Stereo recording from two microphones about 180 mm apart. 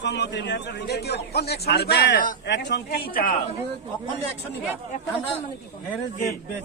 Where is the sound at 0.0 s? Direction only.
75° left (ahead or behind); by 3.3 s 55° left (ahead or behind).